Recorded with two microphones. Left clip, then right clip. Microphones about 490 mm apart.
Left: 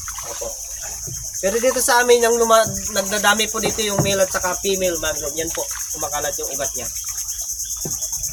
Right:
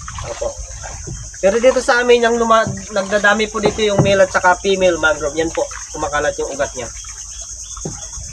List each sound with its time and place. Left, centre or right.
1.4 s speech: left
4.0 s cricket: left